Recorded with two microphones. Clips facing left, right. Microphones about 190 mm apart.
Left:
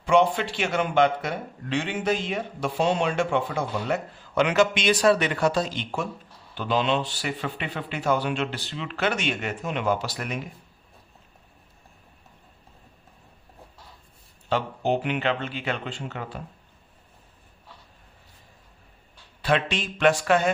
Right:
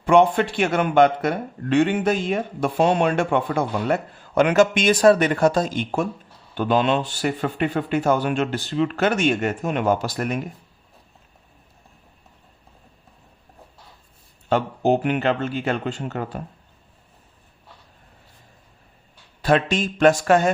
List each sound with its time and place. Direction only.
0.0 s speech: 55° right (ahead or behind)
14.5 s speech: 45° right (ahead or behind)
19.4 s speech: 45° right (ahead or behind)